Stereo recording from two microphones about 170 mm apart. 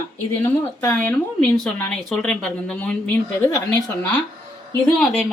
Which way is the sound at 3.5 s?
20° left (ahead or behind).